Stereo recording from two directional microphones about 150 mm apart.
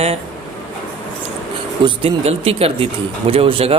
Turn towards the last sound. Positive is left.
turn(degrees=-40)  # may be behind; listen again after turning